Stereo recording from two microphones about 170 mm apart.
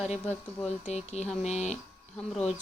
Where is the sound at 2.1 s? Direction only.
5° left (ahead or behind).